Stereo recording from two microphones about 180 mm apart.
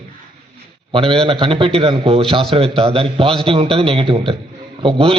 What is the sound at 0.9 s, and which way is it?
A man's voice, 30° right (ahead or behind).